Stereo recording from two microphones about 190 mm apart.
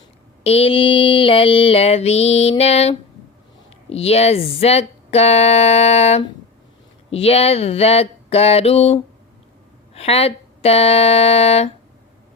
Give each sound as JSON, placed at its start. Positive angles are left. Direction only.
{"t": 0.4, "sound": "speech", "side_deg": 30}